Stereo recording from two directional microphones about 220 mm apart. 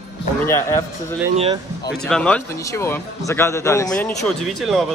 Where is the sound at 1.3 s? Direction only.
25° right (ahead or behind).